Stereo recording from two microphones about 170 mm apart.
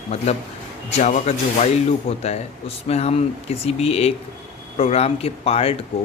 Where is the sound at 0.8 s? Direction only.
40° left (ahead or behind).